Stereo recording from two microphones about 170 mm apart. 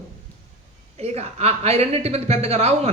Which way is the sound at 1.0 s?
40° right (ahead or behind).